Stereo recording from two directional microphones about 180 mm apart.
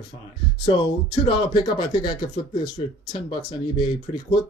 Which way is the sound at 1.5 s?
25° left (ahead or behind).